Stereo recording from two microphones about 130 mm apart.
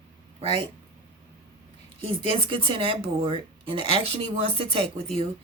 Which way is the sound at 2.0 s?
45° right (ahead or behind).